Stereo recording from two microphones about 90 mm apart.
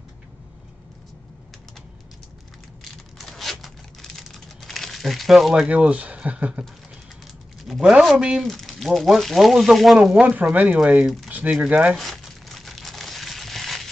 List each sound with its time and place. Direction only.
2.8 s a sound: centre (ahead or behind)
5.7 s speech: 15° right (ahead or behind)
7.6 s speech: 5° right (ahead or behind)
10.2 s speech: 15° right (ahead or behind)
11.9 s crumpling: centre (ahead or behind)